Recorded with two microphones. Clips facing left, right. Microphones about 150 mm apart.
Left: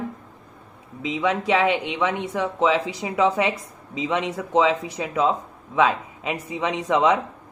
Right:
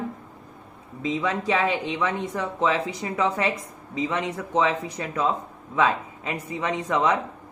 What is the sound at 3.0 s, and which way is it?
A woman's voice, 15° left (ahead or behind).